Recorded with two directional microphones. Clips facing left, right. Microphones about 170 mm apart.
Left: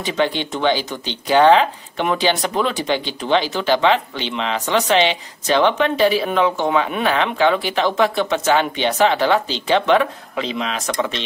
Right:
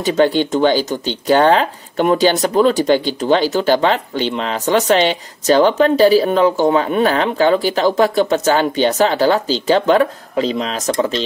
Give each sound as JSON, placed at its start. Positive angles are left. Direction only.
{"t": 0.0, "sound": "speech", "side_deg": -40}